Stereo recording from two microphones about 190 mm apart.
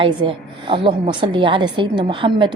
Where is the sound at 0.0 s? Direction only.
25° right (ahead or behind).